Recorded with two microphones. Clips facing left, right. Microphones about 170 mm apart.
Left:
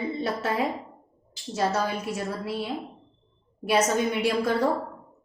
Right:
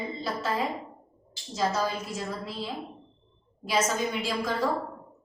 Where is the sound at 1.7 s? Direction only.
70° left (ahead or behind).